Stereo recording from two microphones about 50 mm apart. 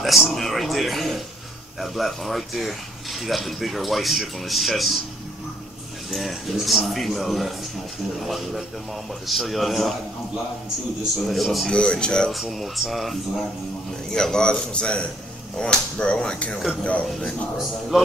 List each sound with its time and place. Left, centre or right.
0.0 s speech: centre
6.1 s speech: centre
11.2 s speech: centre
11.7 s a sound: centre
12.3 s speech: centre
14.1 s a man's voice: centre
15.5 s a sound: centre
17.6 s speech: centre